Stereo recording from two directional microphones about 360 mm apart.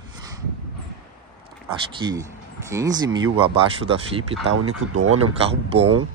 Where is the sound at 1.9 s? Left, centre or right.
Centre.